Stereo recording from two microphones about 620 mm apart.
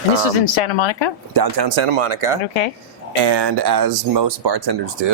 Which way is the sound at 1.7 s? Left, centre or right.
Right.